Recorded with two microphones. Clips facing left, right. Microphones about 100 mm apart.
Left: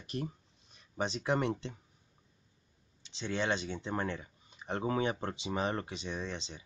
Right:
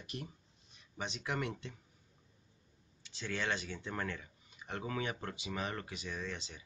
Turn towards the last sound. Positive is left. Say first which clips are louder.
# left 3 dB
turn(degrees=25)  # may be behind; listen again after turning